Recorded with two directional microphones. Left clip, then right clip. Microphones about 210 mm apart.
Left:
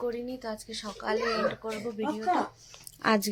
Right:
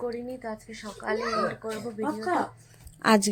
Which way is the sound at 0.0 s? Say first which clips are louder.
Even; centre (ahead or behind).